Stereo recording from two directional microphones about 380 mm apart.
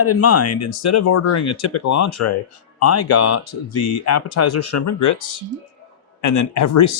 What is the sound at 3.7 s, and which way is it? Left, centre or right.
Speech, left.